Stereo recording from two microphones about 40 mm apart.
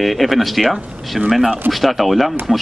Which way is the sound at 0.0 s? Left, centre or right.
Centre.